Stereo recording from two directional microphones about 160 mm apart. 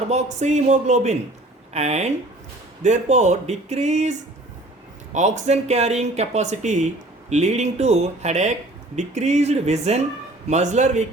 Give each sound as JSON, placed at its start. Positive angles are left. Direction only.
{"t": 0.1, "sound": "speech", "side_deg": -45}